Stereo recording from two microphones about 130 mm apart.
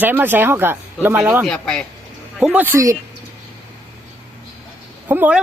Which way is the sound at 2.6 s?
20° right (ahead or behind).